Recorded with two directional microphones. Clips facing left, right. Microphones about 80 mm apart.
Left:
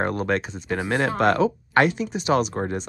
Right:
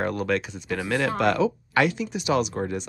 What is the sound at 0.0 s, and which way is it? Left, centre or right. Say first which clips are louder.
Speech: left 2 dB; left.